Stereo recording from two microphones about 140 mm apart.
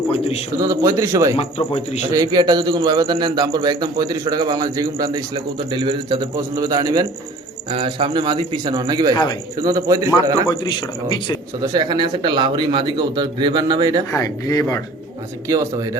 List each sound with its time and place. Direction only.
0.6 s a man's voice: 25° right (ahead or behind)
1.4 s speech: 40° left (ahead or behind)
2.1 s a man's voice: 30° right (ahead or behind)
9.1 s speech: 30° left (ahead or behind)
9.6 s a man's voice: 25° right (ahead or behind)
10.5 s speech: 35° left (ahead or behind)
11.6 s a man's voice: 30° right (ahead or behind)
14.2 s speech: 25° left (ahead or behind)
15.4 s a man's voice: 25° right (ahead or behind)